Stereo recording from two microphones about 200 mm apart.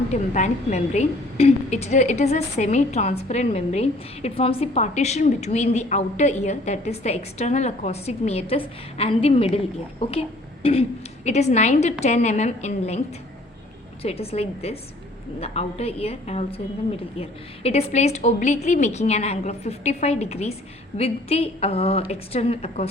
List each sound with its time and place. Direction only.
0.1 s a woman's voice: 35° left (ahead or behind)
14.0 s a woman's voice: 30° left (ahead or behind)